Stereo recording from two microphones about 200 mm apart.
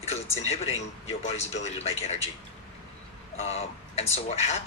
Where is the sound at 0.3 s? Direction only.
30° left (ahead or behind).